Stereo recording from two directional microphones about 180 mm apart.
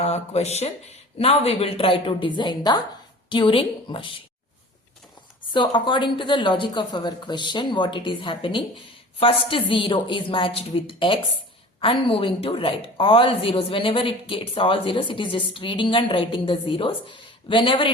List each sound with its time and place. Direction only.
0.0 s a woman's voice: 35° left (ahead or behind)
5.5 s a woman's voice: 25° left (ahead or behind)